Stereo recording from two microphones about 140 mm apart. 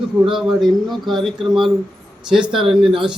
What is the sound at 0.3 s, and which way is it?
Speech, centre (ahead or behind).